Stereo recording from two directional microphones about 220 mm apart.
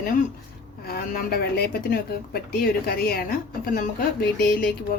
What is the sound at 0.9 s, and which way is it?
A woman's voice, 45° left (ahead or behind).